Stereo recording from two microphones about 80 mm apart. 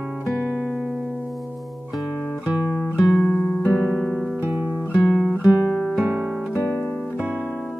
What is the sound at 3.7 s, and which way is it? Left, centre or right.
Guitar, centre.